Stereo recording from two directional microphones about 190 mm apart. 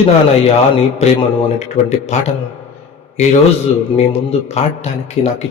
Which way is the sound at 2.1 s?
35° left (ahead or behind).